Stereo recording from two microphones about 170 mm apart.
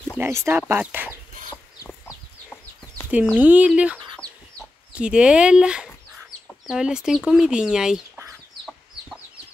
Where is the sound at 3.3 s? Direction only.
10° right (ahead or behind).